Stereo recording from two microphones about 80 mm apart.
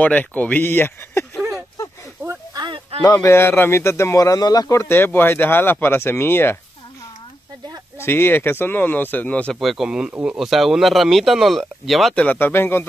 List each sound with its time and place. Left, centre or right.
0.0 s speech: centre
2.5 s a sound: right
3.0 s speech: left
3.3 s speech: left
4.2 s speech: left
4.7 s speech: left
8.0 s speech: left
9.5 s speech: centre
12.2 s speech: left